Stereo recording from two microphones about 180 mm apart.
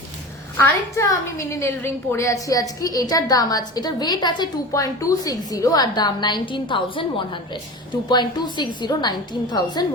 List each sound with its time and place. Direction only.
0.6 s a woman's voice: 15° left (ahead or behind)